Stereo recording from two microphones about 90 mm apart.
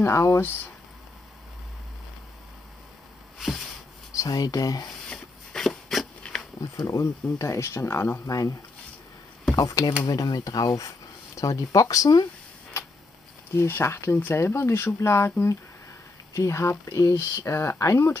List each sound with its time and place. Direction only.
0.0 s speech: 30° left (ahead or behind)
3.3 s a sound: centre (ahead or behind)
4.1 s speech: 40° left (ahead or behind)
5.1 s a sound: 5° left (ahead or behind)
6.6 s speech: 35° left (ahead or behind)
9.6 s speech: 40° left (ahead or behind)
13.5 s speech: 30° left (ahead or behind)